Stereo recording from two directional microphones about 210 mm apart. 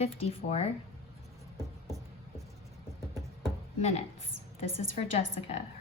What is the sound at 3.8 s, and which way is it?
Speech, 30° left (ahead or behind).